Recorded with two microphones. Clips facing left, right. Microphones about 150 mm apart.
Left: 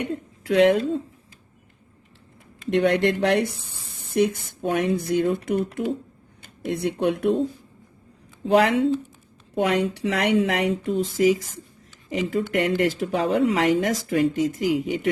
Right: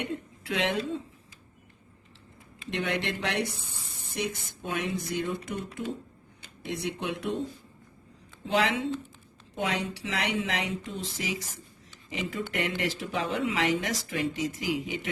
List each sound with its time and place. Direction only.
0.0 s speech: 40° left (ahead or behind)
2.6 s speech: 45° left (ahead or behind)
8.5 s speech: 45° left (ahead or behind)
9.6 s speech: 60° left (ahead or behind)